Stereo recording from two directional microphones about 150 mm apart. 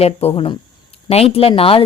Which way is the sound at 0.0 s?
40° left (ahead or behind).